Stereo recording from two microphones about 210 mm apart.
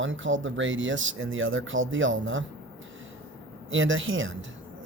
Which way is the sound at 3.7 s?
65° right (ahead or behind).